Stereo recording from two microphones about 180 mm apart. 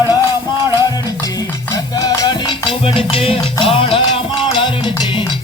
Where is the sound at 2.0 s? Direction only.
20° left (ahead or behind).